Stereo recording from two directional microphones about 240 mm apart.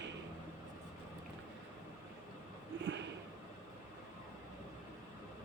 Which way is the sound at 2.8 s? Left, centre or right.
Right.